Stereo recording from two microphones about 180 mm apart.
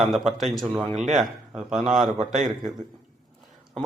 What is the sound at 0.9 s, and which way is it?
Speech, 40° right (ahead or behind).